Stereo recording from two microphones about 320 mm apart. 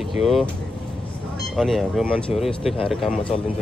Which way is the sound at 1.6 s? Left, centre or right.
Centre.